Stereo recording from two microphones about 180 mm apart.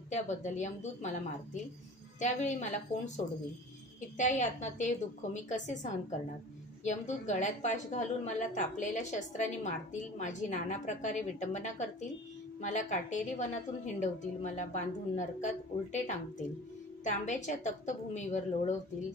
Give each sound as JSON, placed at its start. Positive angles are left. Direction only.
{"t": 0.1, "sound": "a woman's voice", "side_deg": 40}
{"t": 4.2, "sound": "a woman's voice", "side_deg": 40}